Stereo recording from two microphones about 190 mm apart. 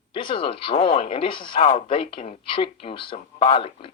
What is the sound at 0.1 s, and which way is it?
Speech, 25° left (ahead or behind).